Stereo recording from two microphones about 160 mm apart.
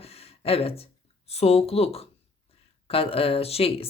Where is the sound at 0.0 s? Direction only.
40° left (ahead or behind).